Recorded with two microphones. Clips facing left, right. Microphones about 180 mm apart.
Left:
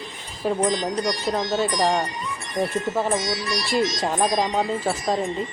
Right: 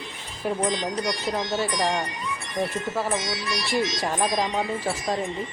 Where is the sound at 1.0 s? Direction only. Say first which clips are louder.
Left 3 dB; 40° left (ahead or behind).